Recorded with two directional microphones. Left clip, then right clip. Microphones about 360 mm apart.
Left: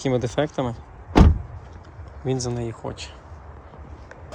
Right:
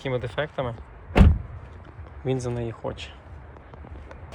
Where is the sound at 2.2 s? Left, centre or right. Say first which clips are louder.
Left 1 dB; centre.